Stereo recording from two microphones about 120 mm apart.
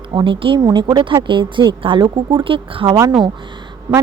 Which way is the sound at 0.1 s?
45° right (ahead or behind).